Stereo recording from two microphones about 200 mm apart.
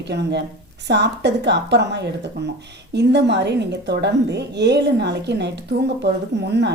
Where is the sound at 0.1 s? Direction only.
60° right (ahead or behind).